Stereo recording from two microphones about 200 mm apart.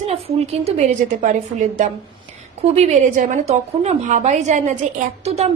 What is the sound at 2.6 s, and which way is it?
A woman's voice, 30° right (ahead or behind).